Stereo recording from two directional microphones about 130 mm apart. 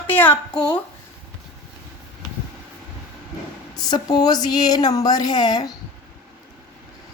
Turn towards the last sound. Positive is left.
turn(degrees=30)  # may be behind; listen again after turning